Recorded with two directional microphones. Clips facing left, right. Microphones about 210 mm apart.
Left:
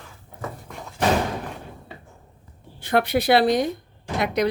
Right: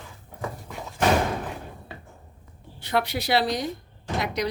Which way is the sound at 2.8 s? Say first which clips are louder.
Left 6 dB; 55° left (ahead or behind).